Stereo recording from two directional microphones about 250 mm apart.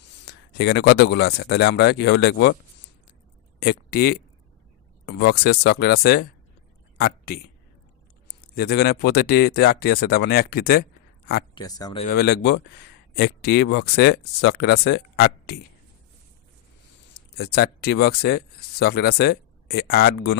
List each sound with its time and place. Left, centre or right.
0.3 s speech: left
3.6 s speech: left
11.5 s speech: centre
12.0 s speech: left
17.2 s speech: left